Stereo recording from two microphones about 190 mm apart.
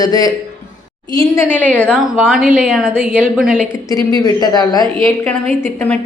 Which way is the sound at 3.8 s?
20° left (ahead or behind).